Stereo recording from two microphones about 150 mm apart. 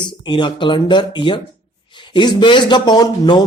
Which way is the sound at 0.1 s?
30° left (ahead or behind).